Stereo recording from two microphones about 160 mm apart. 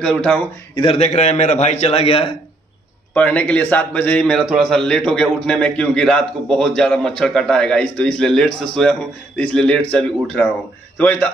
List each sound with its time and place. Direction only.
0.0 s a man's voice: 5° left (ahead or behind)
0.7 s a man's voice: 35° left (ahead or behind)
3.2 s a man's voice: 10° left (ahead or behind)